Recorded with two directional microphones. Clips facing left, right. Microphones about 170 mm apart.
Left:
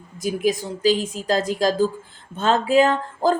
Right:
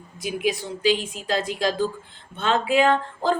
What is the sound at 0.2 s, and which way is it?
Speech, 40° left (ahead or behind).